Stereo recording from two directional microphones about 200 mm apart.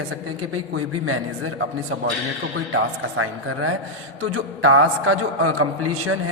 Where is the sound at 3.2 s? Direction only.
90° right.